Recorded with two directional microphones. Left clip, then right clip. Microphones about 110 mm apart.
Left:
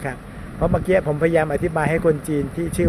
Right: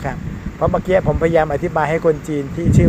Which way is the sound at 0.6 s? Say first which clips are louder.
Right 3 dB; 25° left (ahead or behind).